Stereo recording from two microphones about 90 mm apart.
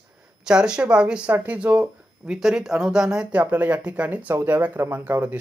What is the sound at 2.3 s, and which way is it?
Speech, 5° right (ahead or behind).